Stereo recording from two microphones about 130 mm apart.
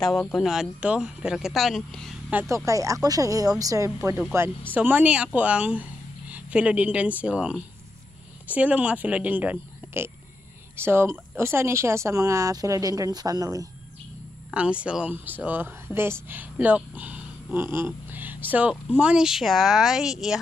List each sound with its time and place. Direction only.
0.3 s speech: centre (ahead or behind)
2.5 s speech: 25° right (ahead or behind)
4.7 s a woman's voice: 10° right (ahead or behind); by 13.7 s 25° right (ahead or behind)
14.5 s speech: 10° right (ahead or behind)